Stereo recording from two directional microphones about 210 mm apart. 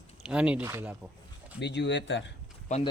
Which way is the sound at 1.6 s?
55° left (ahead or behind).